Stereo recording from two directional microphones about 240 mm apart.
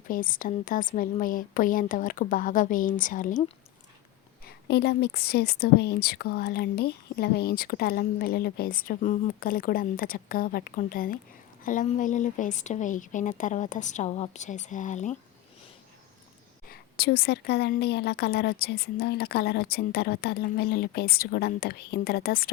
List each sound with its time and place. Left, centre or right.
0.1 s a woman's voice: left
4.4 s a woman's voice: left
16.6 s a woman's voice: left